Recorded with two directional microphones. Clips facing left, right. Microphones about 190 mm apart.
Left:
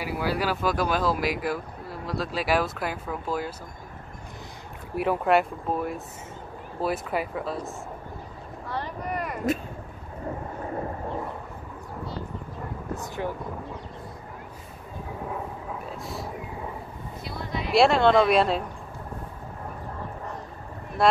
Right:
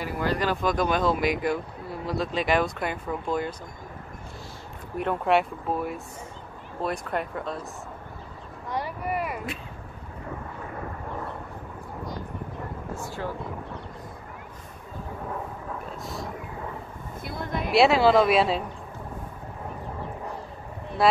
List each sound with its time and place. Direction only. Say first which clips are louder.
0.0 s speech: even; 10° left (ahead or behind)
4.9 s speech: left 1 dB; 5° left (ahead or behind)
8.6 s vehicle: right 2 dB; 10° right (ahead or behind)
12.9 s speech: left 3 dB; 20° left (ahead or behind)
15.8 s vehicle: even; centre (ahead or behind)
17.2 s a sound: right 2 dB; 50° right (ahead or behind)
17.6 s speech: even; centre (ahead or behind)
21.0 s speech: even; centre (ahead or behind)